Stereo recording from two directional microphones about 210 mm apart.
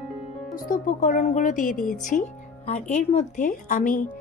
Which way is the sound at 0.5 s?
40° left (ahead or behind).